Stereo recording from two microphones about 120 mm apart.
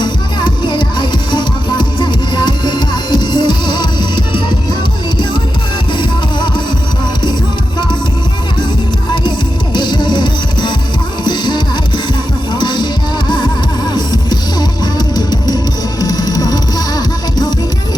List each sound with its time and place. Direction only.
0.0 s music: 40° left (ahead or behind)
9.7 s music: 40° left (ahead or behind)